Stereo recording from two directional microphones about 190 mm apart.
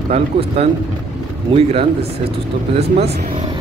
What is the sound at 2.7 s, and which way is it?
Speech, 35° right (ahead or behind).